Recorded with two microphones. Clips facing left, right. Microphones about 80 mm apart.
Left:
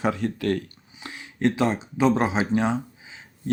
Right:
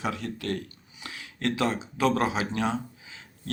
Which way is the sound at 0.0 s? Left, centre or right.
Left.